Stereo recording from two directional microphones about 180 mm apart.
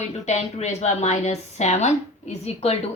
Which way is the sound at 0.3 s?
40° left (ahead or behind).